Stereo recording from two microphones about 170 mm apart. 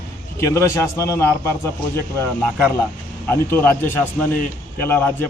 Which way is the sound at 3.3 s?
10° left (ahead or behind).